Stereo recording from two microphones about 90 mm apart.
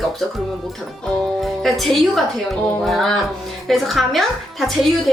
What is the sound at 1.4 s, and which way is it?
A woman's voice, centre (ahead or behind).